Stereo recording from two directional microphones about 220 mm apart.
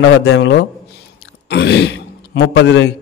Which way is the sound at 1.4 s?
50° left (ahead or behind).